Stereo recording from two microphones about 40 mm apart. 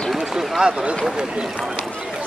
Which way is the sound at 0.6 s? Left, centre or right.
Centre.